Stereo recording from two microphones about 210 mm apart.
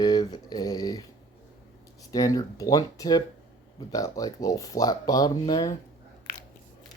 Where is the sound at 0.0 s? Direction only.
20° left (ahead or behind).